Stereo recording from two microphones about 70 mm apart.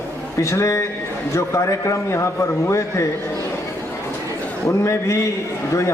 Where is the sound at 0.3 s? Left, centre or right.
Left.